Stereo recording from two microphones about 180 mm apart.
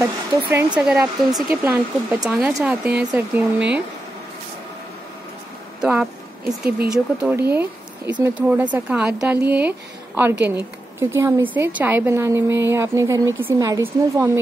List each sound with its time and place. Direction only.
0.0 s a woman's voice: 15° right (ahead or behind)
5.8 s a woman's voice: 10° right (ahead or behind)